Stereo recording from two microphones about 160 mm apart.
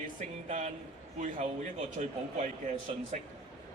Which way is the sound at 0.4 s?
45° right (ahead or behind).